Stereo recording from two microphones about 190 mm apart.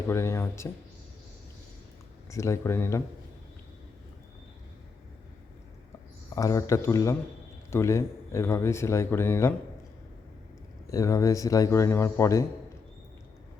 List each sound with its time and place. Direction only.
0.1 s speech: 15° left (ahead or behind)
2.3 s speech: 15° left (ahead or behind)
6.3 s speech: 15° left (ahead or behind)
10.8 s speech: 15° left (ahead or behind)